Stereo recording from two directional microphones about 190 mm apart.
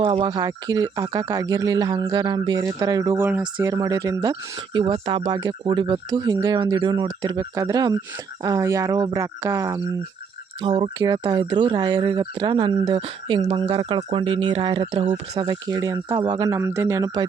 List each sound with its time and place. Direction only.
0.0 s speech: 25° right (ahead or behind)
3.2 s speech: 10° right (ahead or behind)